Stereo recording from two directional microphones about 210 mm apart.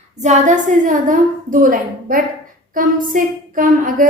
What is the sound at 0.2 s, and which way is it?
Speech, 35° right (ahead or behind).